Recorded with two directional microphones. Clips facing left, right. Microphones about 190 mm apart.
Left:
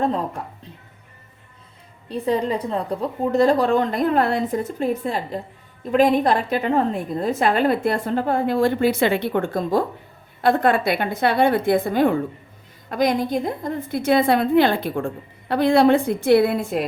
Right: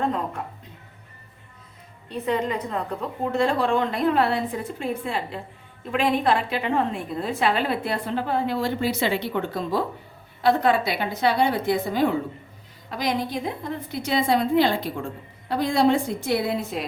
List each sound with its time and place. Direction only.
2.0 s a woman's voice: 35° left (ahead or behind); by 16.8 s 55° left (ahead or behind)